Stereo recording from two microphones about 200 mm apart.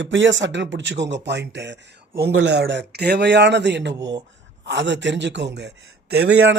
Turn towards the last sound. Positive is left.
turn(degrees=-55)  # may be behind; listen again after turning